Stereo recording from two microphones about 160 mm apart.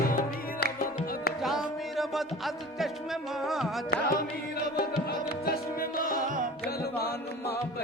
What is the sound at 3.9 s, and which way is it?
Carnatic music, 70° left (ahead or behind).